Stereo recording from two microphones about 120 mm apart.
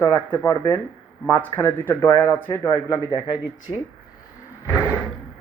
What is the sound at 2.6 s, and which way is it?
Speech, 35° left (ahead or behind).